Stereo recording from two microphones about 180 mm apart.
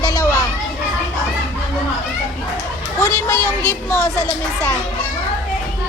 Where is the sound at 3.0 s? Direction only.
15° left (ahead or behind).